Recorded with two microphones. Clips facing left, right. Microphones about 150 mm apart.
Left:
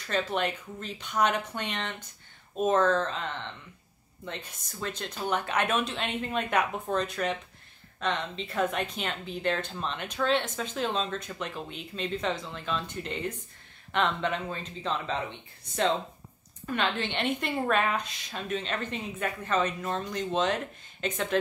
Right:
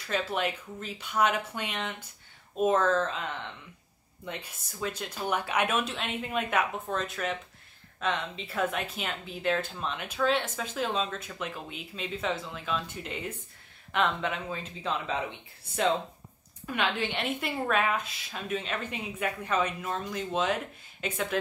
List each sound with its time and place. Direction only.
0.0 s a woman's voice: 5° right (ahead or behind)
16.6 s a woman's voice: 10° right (ahead or behind)